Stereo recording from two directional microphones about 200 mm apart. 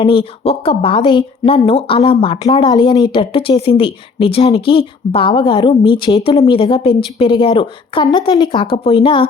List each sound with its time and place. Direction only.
0.0 s speech: 25° left (ahead or behind)